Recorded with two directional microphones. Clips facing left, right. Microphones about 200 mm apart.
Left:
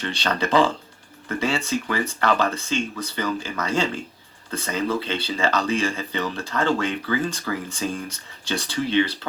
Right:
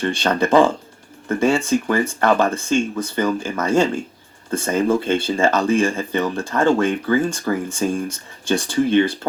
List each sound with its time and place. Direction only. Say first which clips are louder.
0.0 s speech: right 6 dB; 50° right (ahead or behind)